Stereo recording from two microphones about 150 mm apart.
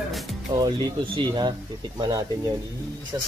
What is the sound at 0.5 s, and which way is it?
Speech, 30° right (ahead or behind).